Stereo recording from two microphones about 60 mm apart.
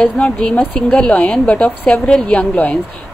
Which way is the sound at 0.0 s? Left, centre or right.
Centre.